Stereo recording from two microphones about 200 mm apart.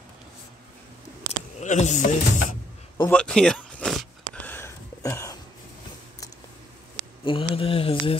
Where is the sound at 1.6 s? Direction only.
35° left (ahead or behind).